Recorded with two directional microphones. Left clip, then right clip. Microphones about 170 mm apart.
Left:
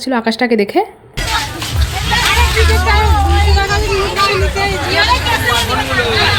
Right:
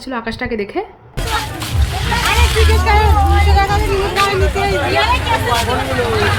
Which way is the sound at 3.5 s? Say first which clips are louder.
Right 2 dB; 65° right (ahead or behind).